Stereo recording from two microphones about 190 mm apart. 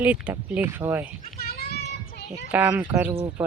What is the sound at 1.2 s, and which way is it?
Children playing, 50° left (ahead or behind).